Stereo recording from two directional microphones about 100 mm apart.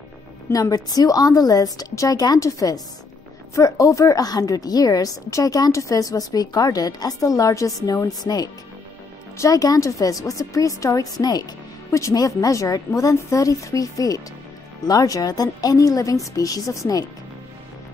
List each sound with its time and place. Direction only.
0.5 s a woman's voice: 35° left (ahead or behind)